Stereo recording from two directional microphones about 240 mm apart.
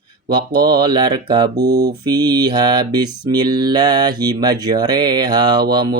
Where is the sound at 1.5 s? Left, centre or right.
Right.